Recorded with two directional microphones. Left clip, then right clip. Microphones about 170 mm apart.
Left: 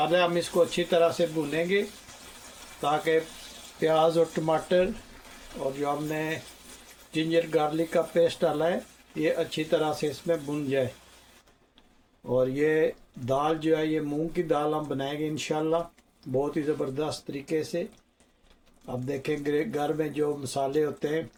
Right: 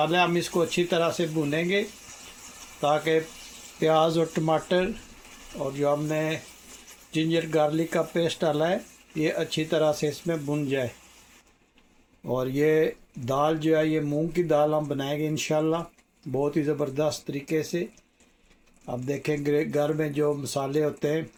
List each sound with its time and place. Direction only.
0.0 s speech: 50° right (ahead or behind)
2.8 s speech: 50° right (ahead or behind)
3.8 s speech: 40° right (ahead or behind)
12.3 s speech: 50° right (ahead or behind)
19.0 s speech: 45° right (ahead or behind)